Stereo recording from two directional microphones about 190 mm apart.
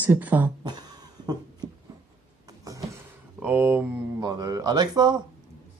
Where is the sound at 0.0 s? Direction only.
10° right (ahead or behind).